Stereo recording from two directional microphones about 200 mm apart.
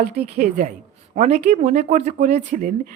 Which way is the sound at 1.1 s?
35° right (ahead or behind).